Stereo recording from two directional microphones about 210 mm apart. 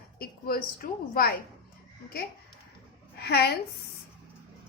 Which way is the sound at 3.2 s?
50° left (ahead or behind).